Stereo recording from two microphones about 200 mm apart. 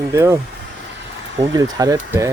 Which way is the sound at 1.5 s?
15° right (ahead or behind).